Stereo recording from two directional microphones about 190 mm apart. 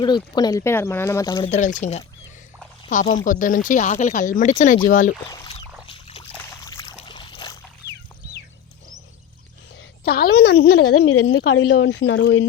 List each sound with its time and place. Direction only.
0.0 s speech: 20° left (ahead or behind)
1.5 s speech: 40° left (ahead or behind)
5.3 s a sound: 25° left (ahead or behind)
7.0 s boat: 25° left (ahead or behind)
10.0 s a woman's voice: 55° left (ahead or behind)
10.9 s a woman's voice: 75° left (ahead or behind)